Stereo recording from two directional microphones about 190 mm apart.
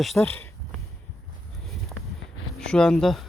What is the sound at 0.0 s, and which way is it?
Speech, centre (ahead or behind).